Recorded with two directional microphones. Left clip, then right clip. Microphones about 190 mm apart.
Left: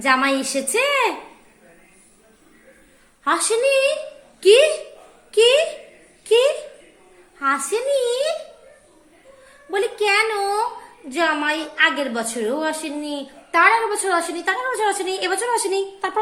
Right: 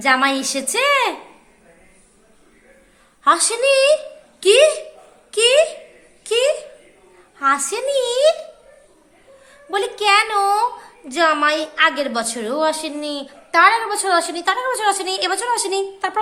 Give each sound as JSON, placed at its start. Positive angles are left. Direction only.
{"t": 0.0, "sound": "a woman's voice", "side_deg": -15}
{"t": 3.2, "sound": "a woman's voice", "side_deg": -20}
{"t": 4.4, "sound": "a sound", "side_deg": -15}
{"t": 5.3, "sound": "a woman's voice", "side_deg": -15}
{"t": 9.6, "sound": "a woman's voice", "side_deg": -15}